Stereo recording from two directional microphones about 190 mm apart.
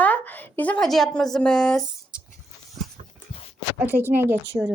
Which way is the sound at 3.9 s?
10° right (ahead or behind).